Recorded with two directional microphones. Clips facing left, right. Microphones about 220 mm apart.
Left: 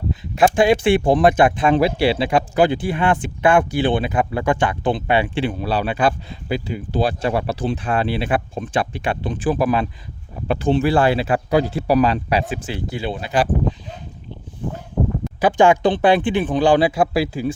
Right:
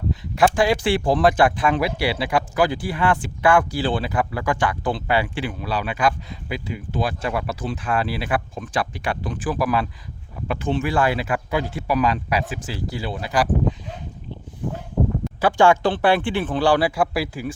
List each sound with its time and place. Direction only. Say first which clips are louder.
0.1 s speech: left 2 dB; 25° left (ahead or behind)
15.4 s speech: left 2 dB; 20° left (ahead or behind)